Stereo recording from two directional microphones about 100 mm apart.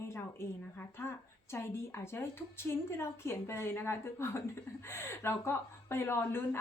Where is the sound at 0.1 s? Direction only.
25° left (ahead or behind).